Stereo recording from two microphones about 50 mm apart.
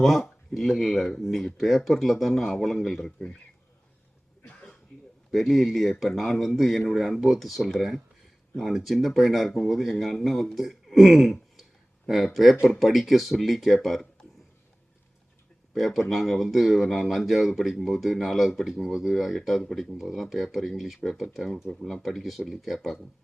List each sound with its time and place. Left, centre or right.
0.0 s speech: centre
3.0 s speech: centre
4.4 s throat clearing: left
5.3 s speech: centre
15.7 s speech: centre